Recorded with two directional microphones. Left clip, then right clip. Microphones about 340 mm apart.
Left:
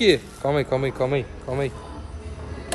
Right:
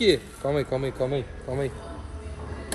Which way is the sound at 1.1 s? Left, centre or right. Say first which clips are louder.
Left 4 dB; centre.